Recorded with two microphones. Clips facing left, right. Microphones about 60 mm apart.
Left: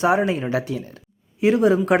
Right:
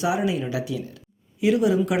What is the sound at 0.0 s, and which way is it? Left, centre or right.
Speech, left.